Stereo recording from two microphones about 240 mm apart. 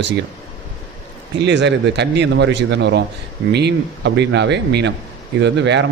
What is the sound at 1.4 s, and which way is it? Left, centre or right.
Speech, right.